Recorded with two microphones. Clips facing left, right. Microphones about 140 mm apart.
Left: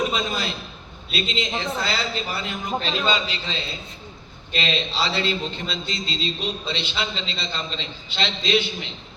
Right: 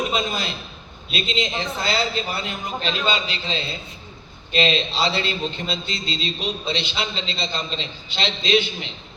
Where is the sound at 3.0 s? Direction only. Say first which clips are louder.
Even; 20° right (ahead or behind).